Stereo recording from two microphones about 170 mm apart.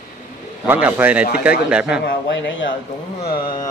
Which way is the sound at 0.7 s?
10° right (ahead or behind).